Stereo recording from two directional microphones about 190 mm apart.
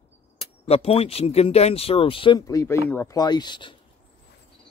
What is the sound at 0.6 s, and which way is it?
Speech, 30° left (ahead or behind).